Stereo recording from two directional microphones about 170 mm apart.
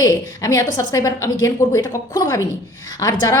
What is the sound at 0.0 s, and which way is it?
A woman's voice, 20° left (ahead or behind).